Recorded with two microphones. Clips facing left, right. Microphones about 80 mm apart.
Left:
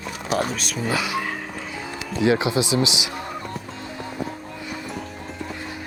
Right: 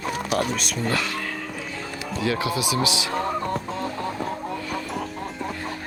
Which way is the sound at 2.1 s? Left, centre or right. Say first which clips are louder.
Left 5 dB; left.